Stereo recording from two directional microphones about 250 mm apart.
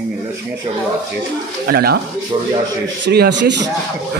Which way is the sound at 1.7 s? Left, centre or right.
Right.